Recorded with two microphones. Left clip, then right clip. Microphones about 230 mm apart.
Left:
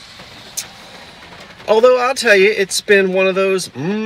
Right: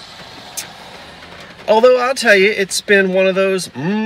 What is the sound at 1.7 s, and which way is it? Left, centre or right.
Speech, centre.